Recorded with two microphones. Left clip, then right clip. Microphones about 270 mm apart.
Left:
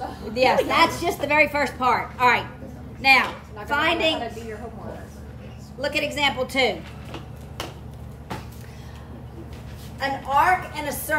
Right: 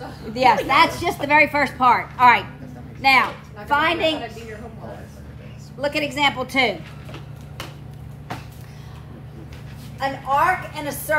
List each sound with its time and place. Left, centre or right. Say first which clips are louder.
0.3 s a woman's voice: right 3 dB; centre
5.8 s a woman's voice: right 2 dB; centre
9.9 s a woman's voice: right 1 dB; centre